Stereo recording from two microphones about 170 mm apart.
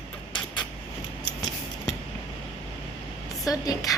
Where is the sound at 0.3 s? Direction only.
25° left (ahead or behind).